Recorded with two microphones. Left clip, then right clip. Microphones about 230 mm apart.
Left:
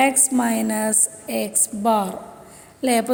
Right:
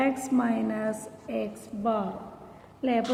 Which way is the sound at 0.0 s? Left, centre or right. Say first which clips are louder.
Left 8 dB; left.